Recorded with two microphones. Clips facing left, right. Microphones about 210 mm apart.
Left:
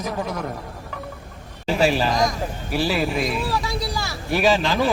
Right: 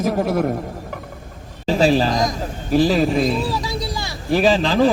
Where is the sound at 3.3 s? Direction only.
25° right (ahead or behind).